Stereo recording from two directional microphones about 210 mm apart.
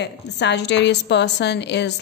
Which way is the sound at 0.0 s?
55° left (ahead or behind).